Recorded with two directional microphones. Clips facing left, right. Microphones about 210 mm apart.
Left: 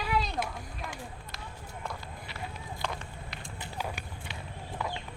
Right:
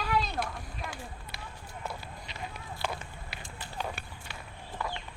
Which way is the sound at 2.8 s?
5° right (ahead or behind).